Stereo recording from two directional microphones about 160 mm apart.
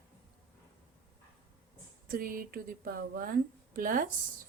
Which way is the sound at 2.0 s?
65° right (ahead or behind).